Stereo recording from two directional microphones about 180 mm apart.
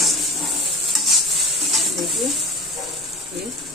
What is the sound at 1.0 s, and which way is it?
Stir, centre (ahead or behind).